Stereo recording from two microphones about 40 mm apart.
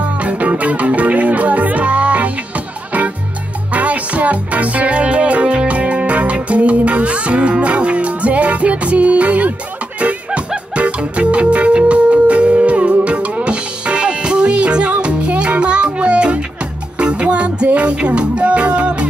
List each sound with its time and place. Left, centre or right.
0.0 s music: right